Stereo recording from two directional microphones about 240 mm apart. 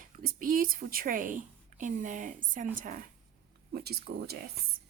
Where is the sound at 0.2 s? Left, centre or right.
Right.